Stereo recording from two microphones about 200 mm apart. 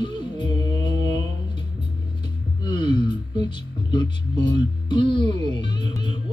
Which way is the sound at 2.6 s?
20° left (ahead or behind).